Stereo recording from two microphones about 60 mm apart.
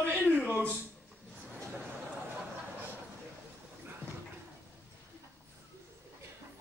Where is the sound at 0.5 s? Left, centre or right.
Right.